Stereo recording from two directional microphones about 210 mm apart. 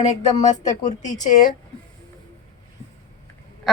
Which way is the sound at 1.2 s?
40° left (ahead or behind).